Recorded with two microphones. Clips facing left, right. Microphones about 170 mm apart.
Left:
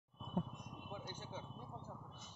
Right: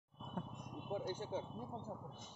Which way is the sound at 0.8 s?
40° right (ahead or behind).